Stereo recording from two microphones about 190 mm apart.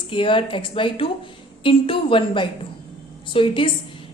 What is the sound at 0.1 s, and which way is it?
A woman's voice, 25° left (ahead or behind).